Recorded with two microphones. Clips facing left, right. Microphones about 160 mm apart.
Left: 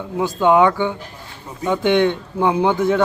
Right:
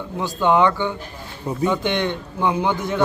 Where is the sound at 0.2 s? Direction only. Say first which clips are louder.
Left 3 dB; 10° left (ahead or behind).